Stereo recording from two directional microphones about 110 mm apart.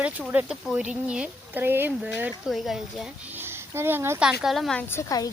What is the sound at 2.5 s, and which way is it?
Speech, 5° right (ahead or behind).